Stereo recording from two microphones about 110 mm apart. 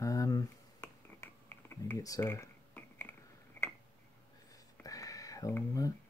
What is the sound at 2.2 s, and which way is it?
Computer keyboard, 20° left (ahead or behind).